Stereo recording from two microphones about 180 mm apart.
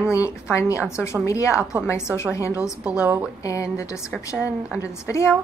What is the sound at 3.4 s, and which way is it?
Speech, 20° left (ahead or behind).